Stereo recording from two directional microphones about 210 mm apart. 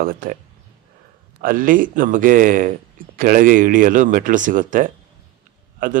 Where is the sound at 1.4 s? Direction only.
40° right (ahead or behind).